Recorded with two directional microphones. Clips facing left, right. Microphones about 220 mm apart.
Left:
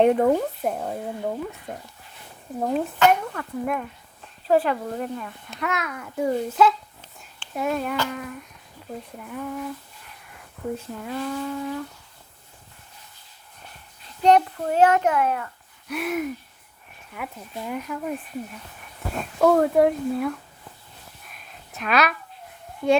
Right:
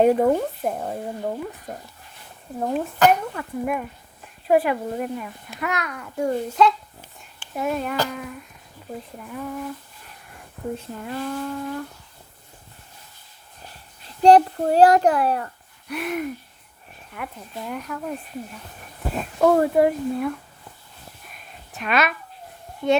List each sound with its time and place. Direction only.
0.0 s a child's voice: 5° right (ahead or behind)
2.6 s a child's voice: centre (ahead or behind)
10.9 s a child's voice: centre (ahead or behind)
14.2 s a child's voice: 35° right (ahead or behind)
15.9 s a child's voice: centre (ahead or behind)
21.2 s a sound: centre (ahead or behind)
22.8 s a child's voice: centre (ahead or behind)